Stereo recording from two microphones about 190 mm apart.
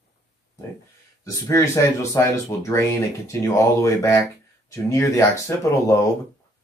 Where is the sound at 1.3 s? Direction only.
15° left (ahead or behind).